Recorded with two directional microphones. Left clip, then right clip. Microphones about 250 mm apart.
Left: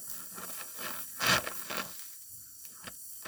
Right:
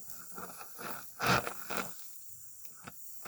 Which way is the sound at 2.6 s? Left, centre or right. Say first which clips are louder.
Left 4 dB; centre.